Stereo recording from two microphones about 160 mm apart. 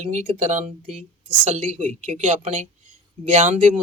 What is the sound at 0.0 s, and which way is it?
Speech, 45° right (ahead or behind).